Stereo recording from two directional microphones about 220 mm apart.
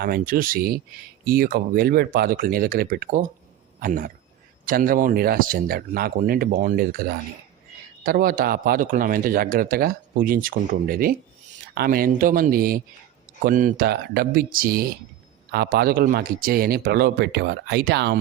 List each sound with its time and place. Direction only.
0.0 s speech: 40° right (ahead or behind)